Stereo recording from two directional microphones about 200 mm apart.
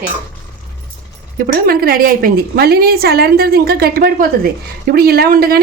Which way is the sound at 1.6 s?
50° right (ahead or behind).